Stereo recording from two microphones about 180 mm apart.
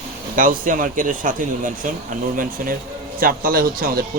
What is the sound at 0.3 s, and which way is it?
Speech, 50° right (ahead or behind).